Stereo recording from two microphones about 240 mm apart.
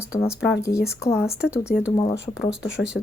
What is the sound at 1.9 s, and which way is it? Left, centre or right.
Speech, centre.